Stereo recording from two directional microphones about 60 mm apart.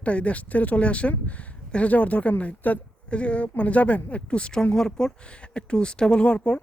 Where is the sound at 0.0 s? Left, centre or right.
Left.